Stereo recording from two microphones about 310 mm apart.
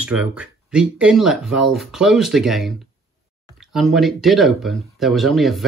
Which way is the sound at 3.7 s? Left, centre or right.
Centre.